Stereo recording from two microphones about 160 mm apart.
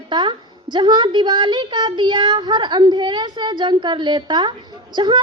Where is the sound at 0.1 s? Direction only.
30° right (ahead or behind).